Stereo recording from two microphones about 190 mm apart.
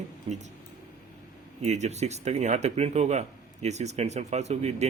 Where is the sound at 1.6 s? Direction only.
35° right (ahead or behind).